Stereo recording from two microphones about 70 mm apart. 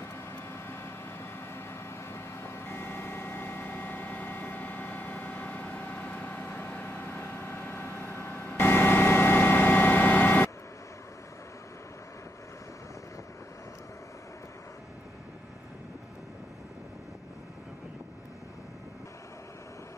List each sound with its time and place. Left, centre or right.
0.0 s vehicle: left